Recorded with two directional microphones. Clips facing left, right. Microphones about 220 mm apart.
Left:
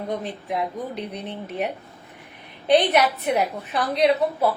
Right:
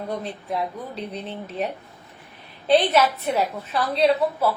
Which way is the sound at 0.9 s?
15° left (ahead or behind).